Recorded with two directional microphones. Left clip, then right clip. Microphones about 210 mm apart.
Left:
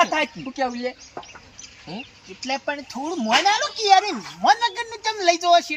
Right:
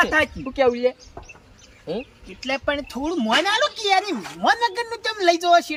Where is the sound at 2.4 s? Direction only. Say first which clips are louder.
Right 3 dB; 30° right (ahead or behind).